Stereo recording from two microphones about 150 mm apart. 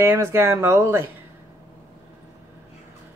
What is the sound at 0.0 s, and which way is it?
Speech, 20° right (ahead or behind).